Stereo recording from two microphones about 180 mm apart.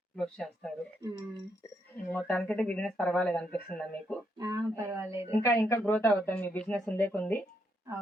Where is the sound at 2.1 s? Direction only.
5° left (ahead or behind).